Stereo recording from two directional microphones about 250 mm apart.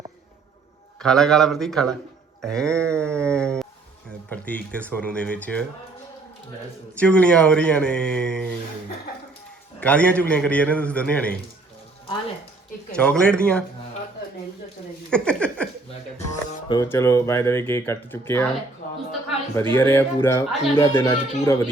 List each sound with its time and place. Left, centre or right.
1.0 s a man's voice: centre
7.0 s a man's voice: centre
9.8 s a man's voice: centre
13.0 s a man's voice: centre
15.1 s a sound: centre
16.1 s music: left
16.8 s speech: centre
19.7 s speech: centre